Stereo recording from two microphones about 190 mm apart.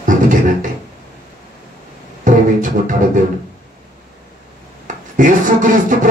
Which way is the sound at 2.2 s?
45° right (ahead or behind).